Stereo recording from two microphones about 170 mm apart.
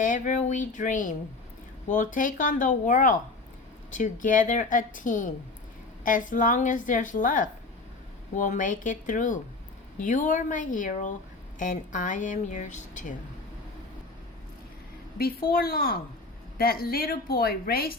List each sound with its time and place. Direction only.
0.0 s speech: 50° left (ahead or behind)
15.2 s a woman's voice: 60° left (ahead or behind)